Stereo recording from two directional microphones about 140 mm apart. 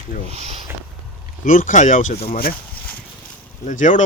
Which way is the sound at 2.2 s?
90° left.